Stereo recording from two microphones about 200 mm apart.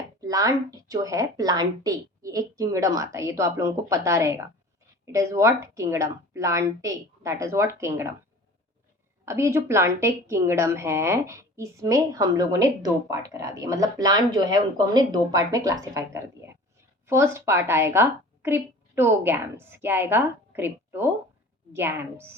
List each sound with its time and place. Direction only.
0.2 s a woman's voice: 15° right (ahead or behind)
9.2 s a woman's voice: 15° right (ahead or behind)